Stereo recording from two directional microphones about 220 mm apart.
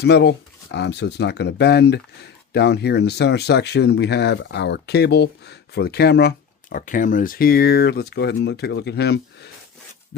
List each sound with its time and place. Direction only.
0.0 s speech: 50° left (ahead or behind)